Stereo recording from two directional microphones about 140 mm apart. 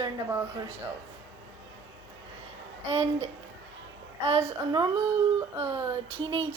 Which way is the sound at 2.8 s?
50° right (ahead or behind).